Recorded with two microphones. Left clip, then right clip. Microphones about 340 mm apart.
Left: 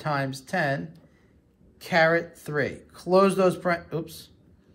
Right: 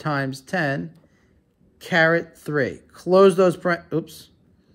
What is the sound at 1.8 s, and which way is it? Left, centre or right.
Speech, right.